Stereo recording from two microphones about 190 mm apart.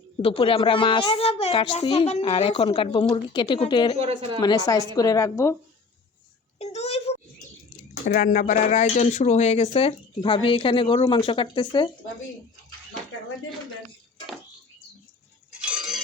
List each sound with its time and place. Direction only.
0.2 s speech: 30° left (ahead or behind)
4.0 s speech: 30° right (ahead or behind)
4.4 s a woman's voice: 20° left (ahead or behind)
6.6 s a sound: 35° left (ahead or behind)
8.1 s speech: 45° left (ahead or behind); by 11.9 s 25° left (ahead or behind)
15.6 s a sound: 5° right (ahead or behind)